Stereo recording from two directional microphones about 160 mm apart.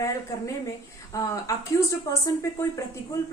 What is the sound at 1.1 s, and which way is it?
Speech, 20° left (ahead or behind).